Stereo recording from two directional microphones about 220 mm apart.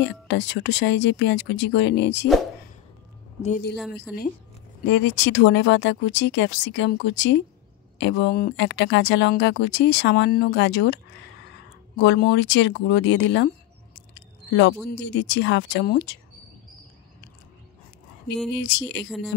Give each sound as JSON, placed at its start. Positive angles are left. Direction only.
{"t": 0.0, "sound": "speech", "side_deg": 55}
{"t": 4.8, "sound": "speech", "side_deg": 55}
{"t": 12.0, "sound": "speech", "side_deg": 50}
{"t": 13.9, "sound": "a sound", "side_deg": 50}
{"t": 15.0, "sound": "speech", "side_deg": 55}
{"t": 18.5, "sound": "speech", "side_deg": 55}
{"t": 19.0, "sound": "speech", "side_deg": -5}